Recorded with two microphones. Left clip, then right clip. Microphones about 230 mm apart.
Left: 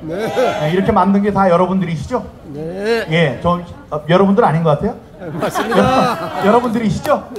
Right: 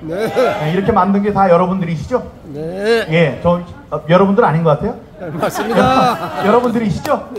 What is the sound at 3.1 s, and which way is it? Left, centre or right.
A man's voice, left.